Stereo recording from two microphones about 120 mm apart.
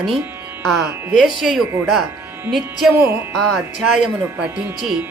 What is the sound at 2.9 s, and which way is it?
Speech, 15° right (ahead or behind).